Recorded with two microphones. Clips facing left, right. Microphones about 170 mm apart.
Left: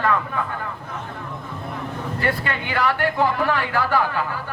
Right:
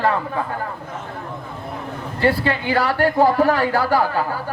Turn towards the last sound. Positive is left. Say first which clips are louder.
# right 3 dB
turn(degrees=-40)  # may be behind; listen again after turning